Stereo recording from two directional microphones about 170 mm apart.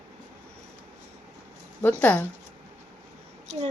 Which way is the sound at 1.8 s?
10° left (ahead or behind).